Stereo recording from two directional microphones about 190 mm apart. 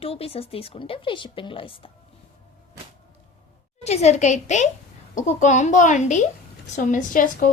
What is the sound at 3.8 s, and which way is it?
A woman's voice, 35° left (ahead or behind).